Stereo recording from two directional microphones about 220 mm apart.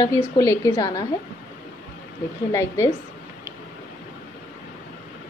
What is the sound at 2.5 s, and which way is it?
Speech, 15° left (ahead or behind).